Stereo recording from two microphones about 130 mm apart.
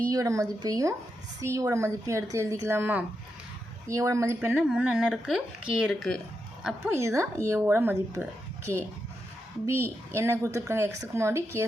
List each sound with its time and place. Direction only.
0.1 s a woman's voice: 25° right (ahead or behind); by 6.9 s 5° right (ahead or behind)
6.9 s a woman's voice: 20° right (ahead or behind)